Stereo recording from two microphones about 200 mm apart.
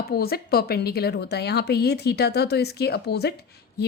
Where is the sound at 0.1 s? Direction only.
50° left (ahead or behind).